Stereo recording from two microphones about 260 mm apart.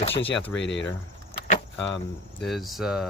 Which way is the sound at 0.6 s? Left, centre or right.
Left.